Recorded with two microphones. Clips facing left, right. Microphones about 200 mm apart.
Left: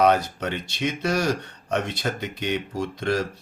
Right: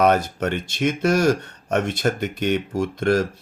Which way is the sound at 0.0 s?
50° right (ahead or behind).